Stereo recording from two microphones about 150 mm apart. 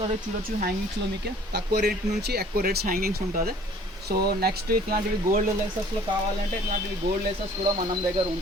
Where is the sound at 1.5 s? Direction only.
90° right.